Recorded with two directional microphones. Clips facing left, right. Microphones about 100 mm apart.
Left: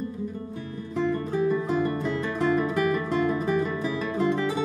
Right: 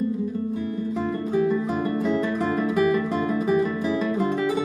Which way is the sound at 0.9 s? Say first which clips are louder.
Even; 15° right (ahead or behind).